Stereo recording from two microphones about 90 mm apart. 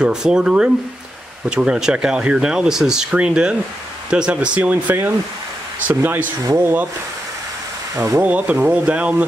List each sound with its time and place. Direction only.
0.0 s speech: 10° right (ahead or behind)
6.4 s speech: 30° right (ahead or behind)
7.9 s speech: 40° right (ahead or behind)
8.2 s speech: 15° right (ahead or behind)